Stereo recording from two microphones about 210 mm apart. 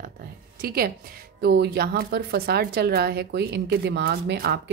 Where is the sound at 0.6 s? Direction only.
45° right (ahead or behind).